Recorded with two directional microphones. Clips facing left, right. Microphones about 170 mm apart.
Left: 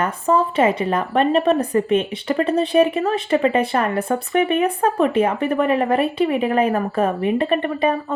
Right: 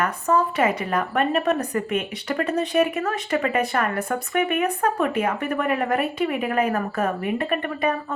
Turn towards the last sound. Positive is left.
turn(degrees=30)  # may be behind; listen again after turning